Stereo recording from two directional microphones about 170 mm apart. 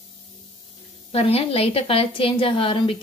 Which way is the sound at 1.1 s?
35° left (ahead or behind).